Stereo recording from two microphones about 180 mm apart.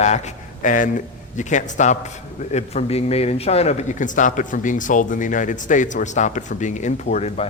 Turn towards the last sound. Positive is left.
turn(degrees=35)  # may be behind; listen again after turning